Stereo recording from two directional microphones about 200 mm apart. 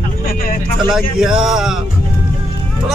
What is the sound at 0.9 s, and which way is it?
Speech, centre (ahead or behind).